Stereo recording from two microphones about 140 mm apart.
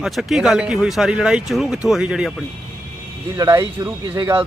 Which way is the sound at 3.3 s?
20° right (ahead or behind).